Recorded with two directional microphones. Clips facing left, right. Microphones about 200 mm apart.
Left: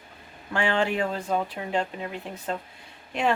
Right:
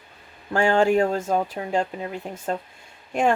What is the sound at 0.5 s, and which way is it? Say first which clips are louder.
Speech: right 6 dB; 45° right (ahead or behind).